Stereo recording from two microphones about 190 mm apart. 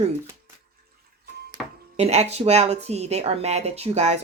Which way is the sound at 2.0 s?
35° right (ahead or behind).